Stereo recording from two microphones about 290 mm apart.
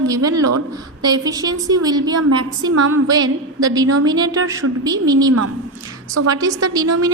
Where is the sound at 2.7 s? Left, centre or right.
Right.